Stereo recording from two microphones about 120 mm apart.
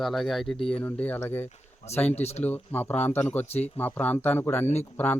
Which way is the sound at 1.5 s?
65° left (ahead or behind).